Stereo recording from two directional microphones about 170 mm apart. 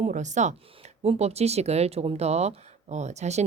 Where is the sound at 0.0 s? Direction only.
45° right (ahead or behind).